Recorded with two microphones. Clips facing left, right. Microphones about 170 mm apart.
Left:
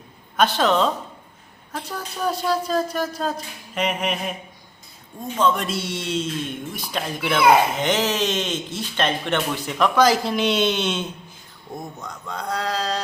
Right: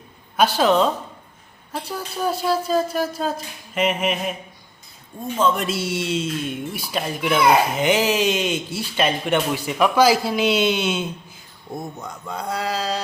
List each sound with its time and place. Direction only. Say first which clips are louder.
0.3 s speech: right 2 dB; 5° right (ahead or behind)
1.9 s speech: right 1 dB; 5° right (ahead or behind)
5.4 s speech: right 1 dB; 5° right (ahead or behind)